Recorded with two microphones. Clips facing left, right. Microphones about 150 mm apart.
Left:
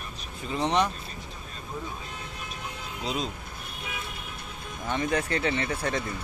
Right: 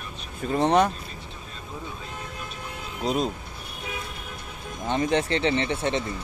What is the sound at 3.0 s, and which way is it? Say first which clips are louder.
Speech: right 6 dB; 45° right (ahead or behind).